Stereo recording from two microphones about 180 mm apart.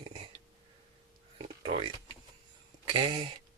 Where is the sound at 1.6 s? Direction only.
30° right (ahead or behind).